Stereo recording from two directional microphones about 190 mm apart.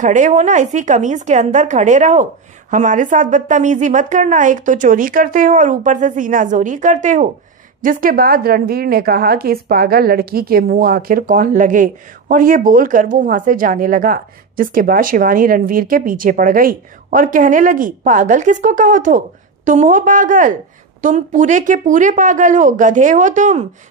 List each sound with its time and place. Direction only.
0.0 s a woman's voice: 40° right (ahead or behind)